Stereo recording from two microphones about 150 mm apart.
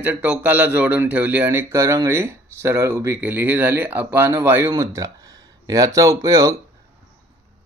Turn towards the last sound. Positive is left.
turn(degrees=-20)  # may be behind; listen again after turning